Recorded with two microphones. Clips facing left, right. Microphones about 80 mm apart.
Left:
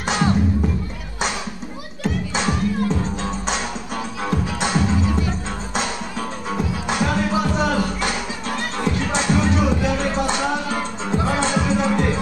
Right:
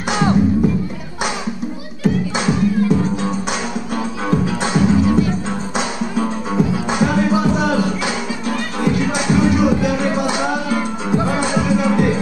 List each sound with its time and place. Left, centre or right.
0.1 s music: centre
2.0 s music: centre